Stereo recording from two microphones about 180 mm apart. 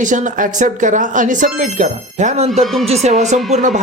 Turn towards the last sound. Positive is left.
turn(degrees=-40)  # may be behind; listen again after turning